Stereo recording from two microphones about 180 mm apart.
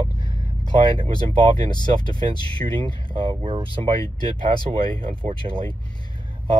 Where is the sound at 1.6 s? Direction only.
25° left (ahead or behind).